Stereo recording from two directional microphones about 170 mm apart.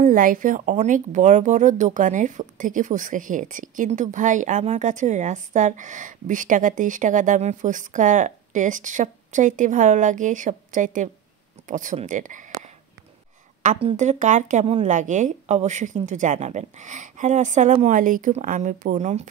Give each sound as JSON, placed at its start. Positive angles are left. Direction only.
{"t": 0.0, "sound": "a woman's voice", "side_deg": -55}
{"t": 13.7, "sound": "a woman's voice", "side_deg": -40}